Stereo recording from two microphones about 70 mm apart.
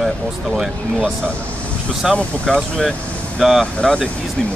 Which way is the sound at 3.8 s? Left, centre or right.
Centre.